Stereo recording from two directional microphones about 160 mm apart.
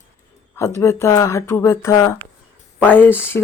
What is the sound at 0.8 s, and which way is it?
Speech, 15° left (ahead or behind).